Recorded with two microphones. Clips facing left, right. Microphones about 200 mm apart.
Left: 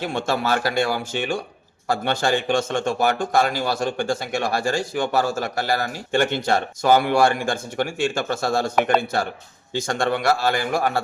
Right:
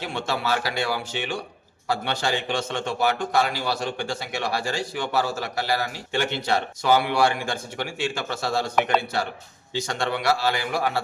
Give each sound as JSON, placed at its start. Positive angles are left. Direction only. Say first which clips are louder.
{"t": 0.0, "sound": "a man's voice", "louder": "left 4 dB", "side_deg": 50}